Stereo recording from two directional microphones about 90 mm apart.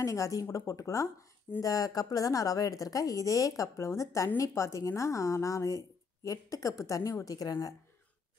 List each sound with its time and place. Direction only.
0.0 s a woman's voice: 35° left (ahead or behind)